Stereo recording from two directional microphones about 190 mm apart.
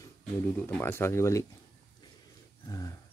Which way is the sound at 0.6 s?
10° left (ahead or behind).